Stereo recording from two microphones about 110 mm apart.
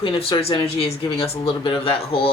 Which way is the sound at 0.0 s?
55° left (ahead or behind).